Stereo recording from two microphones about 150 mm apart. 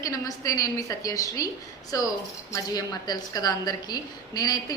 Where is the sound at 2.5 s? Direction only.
25° left (ahead or behind).